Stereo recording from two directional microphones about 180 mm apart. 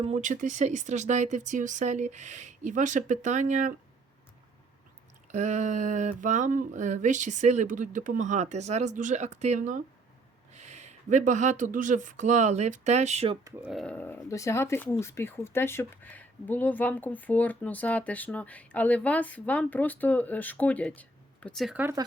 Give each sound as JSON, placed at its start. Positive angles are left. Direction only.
{"t": 0.0, "sound": "speech", "side_deg": -40}
{"t": 5.3, "sound": "speech", "side_deg": -40}
{"t": 13.6, "sound": "speech", "side_deg": 0}